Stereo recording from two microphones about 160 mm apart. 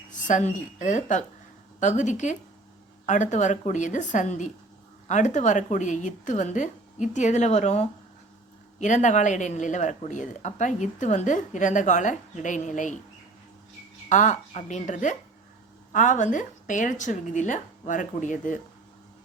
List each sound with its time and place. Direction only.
0.1 s a woman's voice: 50° left (ahead or behind)
14.1 s speech: 50° left (ahead or behind)